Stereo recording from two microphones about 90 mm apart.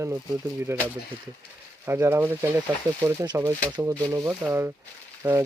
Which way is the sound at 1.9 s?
30° right (ahead or behind).